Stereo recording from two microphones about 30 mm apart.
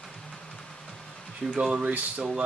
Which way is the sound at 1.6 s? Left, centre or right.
Right.